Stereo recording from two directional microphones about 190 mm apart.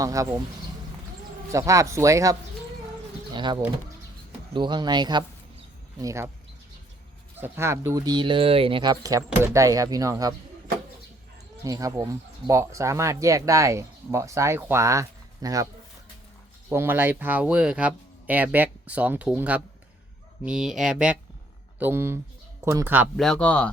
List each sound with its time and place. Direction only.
0.0 s speech: 15° right (ahead or behind)
1.5 s speech: 15° right (ahead or behind)
3.3 s speech: 25° right (ahead or behind)
7.3 s speech: 10° right (ahead or behind)
11.6 s speech: 20° right (ahead or behind)
16.6 s speech: 10° right (ahead or behind)
23.1 s speech: centre (ahead or behind)